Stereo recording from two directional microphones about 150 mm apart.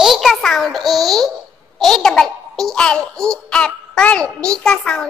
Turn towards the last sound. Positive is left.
turn(degrees=5)  # may be behind; listen again after turning